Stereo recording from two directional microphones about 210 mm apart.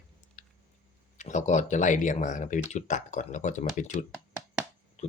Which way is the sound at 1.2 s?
35° left (ahead or behind).